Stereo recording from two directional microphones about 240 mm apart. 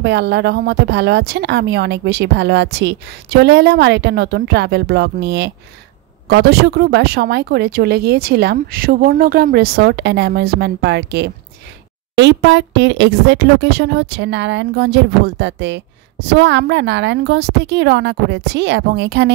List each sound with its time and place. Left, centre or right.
0.0 s a woman's voice: right